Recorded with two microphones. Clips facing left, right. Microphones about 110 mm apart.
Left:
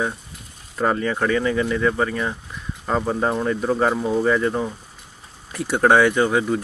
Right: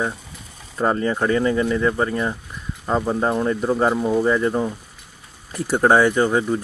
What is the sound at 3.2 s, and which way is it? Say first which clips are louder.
Speech: right 2 dB; 15° right (ahead or behind).